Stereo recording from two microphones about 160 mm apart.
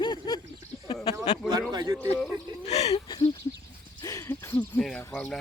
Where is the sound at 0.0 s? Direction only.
30° left (ahead or behind).